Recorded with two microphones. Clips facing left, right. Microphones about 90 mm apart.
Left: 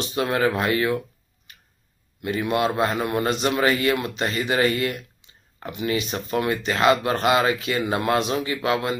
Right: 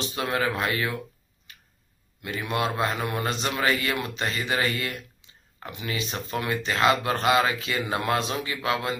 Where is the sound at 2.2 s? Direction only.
25° left (ahead or behind).